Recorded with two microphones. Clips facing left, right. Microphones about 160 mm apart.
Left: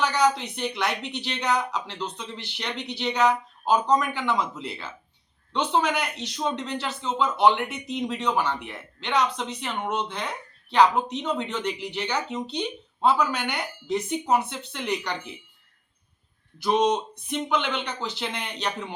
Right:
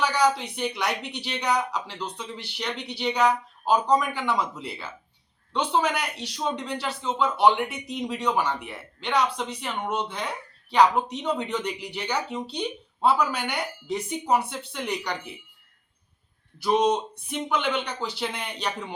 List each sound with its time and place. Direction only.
0.0 s speech: 10° right (ahead or behind)
16.6 s speech: 10° right (ahead or behind)